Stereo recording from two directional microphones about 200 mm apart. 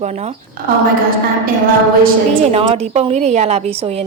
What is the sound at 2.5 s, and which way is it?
A woman's voice, 30° right (ahead or behind).